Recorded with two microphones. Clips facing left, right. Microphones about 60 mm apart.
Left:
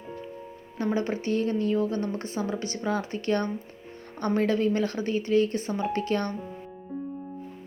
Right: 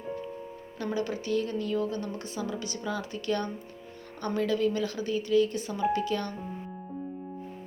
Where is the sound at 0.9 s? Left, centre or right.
Left.